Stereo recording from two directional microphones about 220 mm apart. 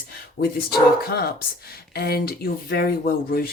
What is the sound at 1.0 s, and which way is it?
Speech, 45° left (ahead or behind).